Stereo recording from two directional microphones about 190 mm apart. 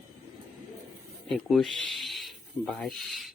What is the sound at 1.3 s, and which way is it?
Speech, centre (ahead or behind).